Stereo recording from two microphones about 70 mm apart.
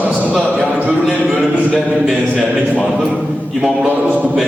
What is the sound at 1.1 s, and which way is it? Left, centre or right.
Speech, centre.